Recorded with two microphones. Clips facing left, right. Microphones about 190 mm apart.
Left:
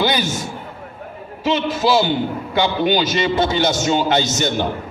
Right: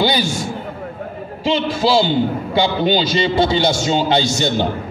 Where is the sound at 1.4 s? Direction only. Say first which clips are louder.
Right 1 dB; 25° right (ahead or behind).